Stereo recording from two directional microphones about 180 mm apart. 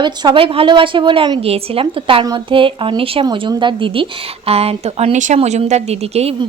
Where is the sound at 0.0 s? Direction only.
25° right (ahead or behind).